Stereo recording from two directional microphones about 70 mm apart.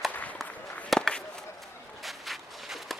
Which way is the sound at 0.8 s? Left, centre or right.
Centre.